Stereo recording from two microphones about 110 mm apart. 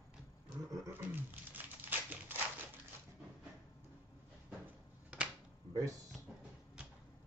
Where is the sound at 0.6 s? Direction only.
30° right (ahead or behind).